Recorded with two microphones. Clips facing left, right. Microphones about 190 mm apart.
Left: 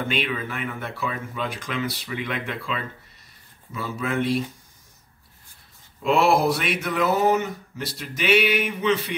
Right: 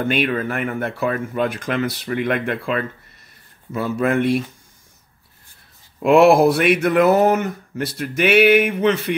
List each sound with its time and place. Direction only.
0.0 s speech: 55° right (ahead or behind)
6.0 s speech: 60° right (ahead or behind)